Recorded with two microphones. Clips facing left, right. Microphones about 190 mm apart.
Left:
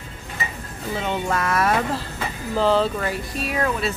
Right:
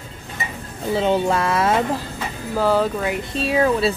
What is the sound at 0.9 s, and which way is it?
Speech, 30° right (ahead or behind).